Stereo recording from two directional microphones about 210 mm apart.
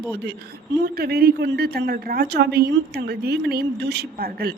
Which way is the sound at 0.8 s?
50° right (ahead or behind).